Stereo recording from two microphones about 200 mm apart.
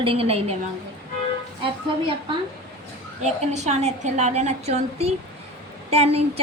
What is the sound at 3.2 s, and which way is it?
A woman's voice, 35° right (ahead or behind).